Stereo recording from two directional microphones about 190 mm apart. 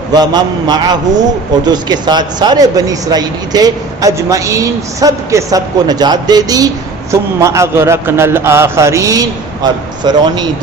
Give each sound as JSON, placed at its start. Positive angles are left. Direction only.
{"t": 0.1, "sound": "a man's voice", "side_deg": -20}